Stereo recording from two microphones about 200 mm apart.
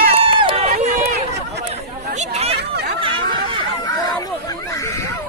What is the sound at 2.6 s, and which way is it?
Chatter, 55° right (ahead or behind).